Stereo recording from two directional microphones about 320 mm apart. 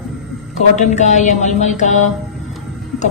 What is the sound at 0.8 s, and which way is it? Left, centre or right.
A woman's voice, left.